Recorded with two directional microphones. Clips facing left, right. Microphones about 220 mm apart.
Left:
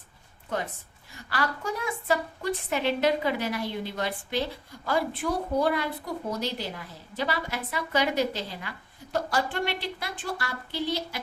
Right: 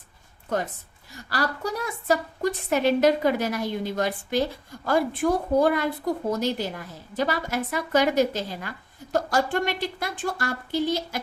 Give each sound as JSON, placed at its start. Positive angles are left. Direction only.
{"t": 1.3, "sound": "a woman's voice", "side_deg": -40}